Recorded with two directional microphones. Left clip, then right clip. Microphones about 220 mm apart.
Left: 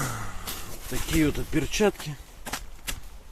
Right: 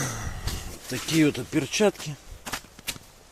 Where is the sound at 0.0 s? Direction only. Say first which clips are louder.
Even; 10° right (ahead or behind).